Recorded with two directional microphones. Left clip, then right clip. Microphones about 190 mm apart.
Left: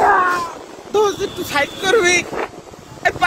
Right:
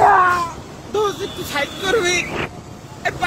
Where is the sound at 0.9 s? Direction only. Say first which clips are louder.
Left 4 dB; 55° left (ahead or behind).